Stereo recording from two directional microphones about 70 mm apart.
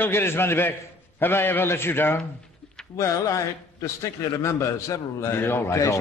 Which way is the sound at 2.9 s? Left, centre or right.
Left.